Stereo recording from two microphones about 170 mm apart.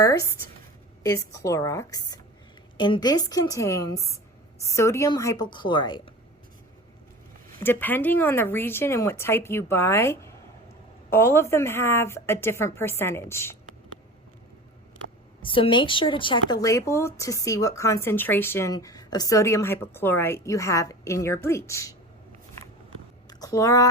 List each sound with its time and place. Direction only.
0.0 s speech: 20° left (ahead or behind)
7.6 s speech: 10° left (ahead or behind)
15.4 s speech: 30° left (ahead or behind)
23.4 s speech: 20° left (ahead or behind)